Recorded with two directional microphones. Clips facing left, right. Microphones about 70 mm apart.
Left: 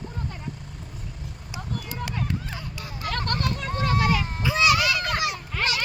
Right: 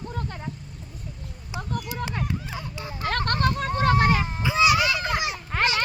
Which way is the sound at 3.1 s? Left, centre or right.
Right.